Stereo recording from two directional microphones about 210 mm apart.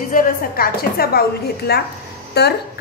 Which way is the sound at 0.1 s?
40° left (ahead or behind).